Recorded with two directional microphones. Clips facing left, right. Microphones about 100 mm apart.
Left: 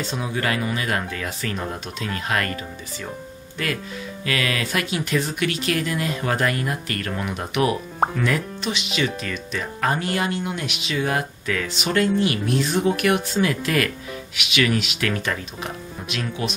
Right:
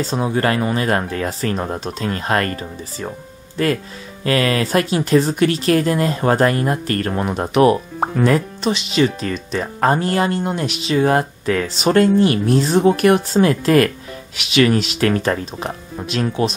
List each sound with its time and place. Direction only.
0.0 s speech: 35° right (ahead or behind)